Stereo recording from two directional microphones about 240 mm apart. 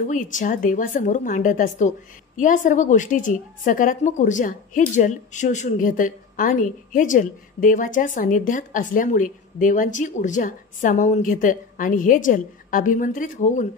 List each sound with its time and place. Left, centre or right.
0.0 s a woman's voice: left